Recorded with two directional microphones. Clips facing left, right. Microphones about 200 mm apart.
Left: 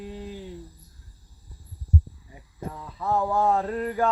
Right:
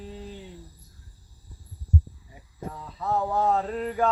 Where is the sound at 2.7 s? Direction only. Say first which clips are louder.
Left 2 dB; 5° left (ahead or behind).